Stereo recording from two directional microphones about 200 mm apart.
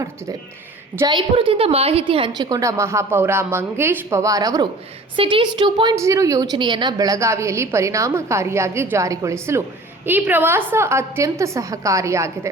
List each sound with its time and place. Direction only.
0.9 s a woman's voice: 20° right (ahead or behind)